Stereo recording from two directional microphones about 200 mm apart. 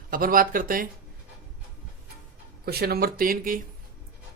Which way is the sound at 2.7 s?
50° right (ahead or behind).